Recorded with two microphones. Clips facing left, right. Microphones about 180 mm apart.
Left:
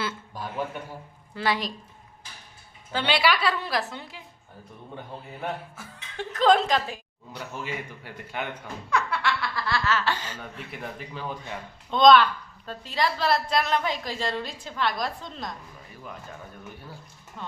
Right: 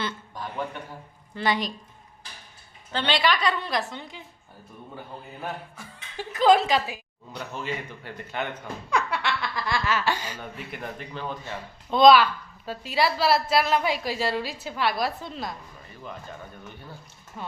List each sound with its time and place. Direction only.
0.0 s a man's voice: 5° left (ahead or behind)
2.9 s a woman's voice: 10° left (ahead or behind)
5.4 s a man's voice: centre (ahead or behind)
7.6 s a woman's voice: 10° left (ahead or behind)
8.9 s laughter: 15° right (ahead or behind)
10.4 s a man's voice: 5° right (ahead or behind)
11.5 s a woman's voice: 5° right (ahead or behind)
17.4 s a woman's voice: 10° right (ahead or behind)